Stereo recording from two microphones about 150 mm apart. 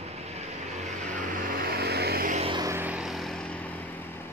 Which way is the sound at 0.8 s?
60° right (ahead or behind).